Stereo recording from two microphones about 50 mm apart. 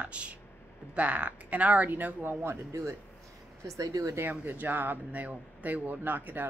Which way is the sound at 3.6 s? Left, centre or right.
Right.